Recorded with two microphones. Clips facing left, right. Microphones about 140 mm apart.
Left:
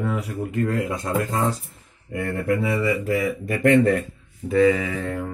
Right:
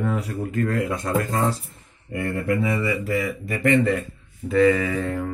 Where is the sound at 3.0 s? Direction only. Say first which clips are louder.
Left 2 dB; 50° left (ahead or behind).